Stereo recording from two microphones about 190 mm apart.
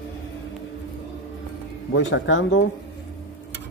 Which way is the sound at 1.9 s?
80° left.